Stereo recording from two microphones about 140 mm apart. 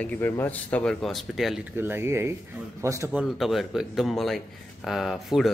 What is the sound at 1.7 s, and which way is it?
A man's voice, 15° right (ahead or behind).